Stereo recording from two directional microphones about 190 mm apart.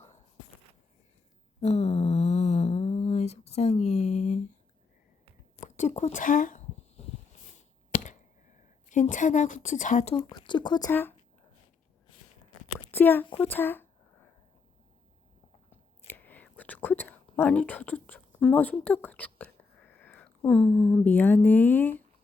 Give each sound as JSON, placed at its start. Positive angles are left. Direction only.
{"t": 1.6, "sound": "a sound", "side_deg": 35}
{"t": 5.6, "sound": "a sound", "side_deg": 40}
{"t": 7.9, "sound": "chop", "side_deg": 40}
{"t": 8.9, "sound": "a woman's voice", "side_deg": 40}
{"t": 10.2, "sound": "speech", "side_deg": 20}
{"t": 12.9, "sound": "speech", "side_deg": 10}
{"t": 13.2, "sound": "speech", "side_deg": 30}
{"t": 13.5, "sound": "a sound", "side_deg": 10}
{"t": 15.7, "sound": "whispering", "side_deg": 10}